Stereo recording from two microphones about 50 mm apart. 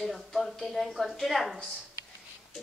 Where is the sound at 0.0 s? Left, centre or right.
Centre.